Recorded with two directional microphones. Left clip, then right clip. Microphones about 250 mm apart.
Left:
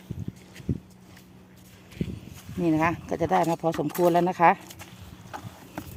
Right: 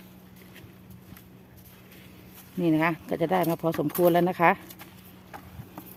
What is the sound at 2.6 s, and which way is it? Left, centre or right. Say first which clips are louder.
Speech: even; centre.